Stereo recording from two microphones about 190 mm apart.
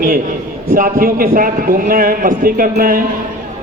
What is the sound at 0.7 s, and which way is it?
A man's voice, 50° right (ahead or behind).